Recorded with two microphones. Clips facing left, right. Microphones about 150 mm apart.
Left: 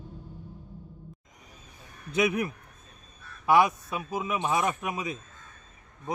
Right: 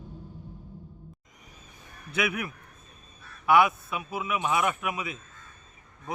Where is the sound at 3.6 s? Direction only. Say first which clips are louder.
Right 1 dB; 40° left (ahead or behind).